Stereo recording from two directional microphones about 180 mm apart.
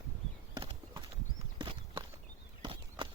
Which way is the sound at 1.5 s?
30° right (ahead or behind).